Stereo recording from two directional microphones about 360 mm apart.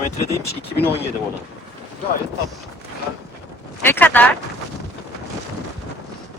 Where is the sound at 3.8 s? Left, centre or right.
Centre.